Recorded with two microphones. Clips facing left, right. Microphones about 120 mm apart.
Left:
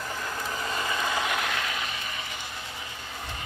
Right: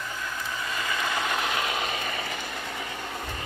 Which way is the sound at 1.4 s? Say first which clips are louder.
Right 2 dB; 5° right (ahead or behind).